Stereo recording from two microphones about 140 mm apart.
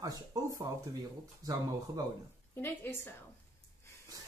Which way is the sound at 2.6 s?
15° left (ahead or behind).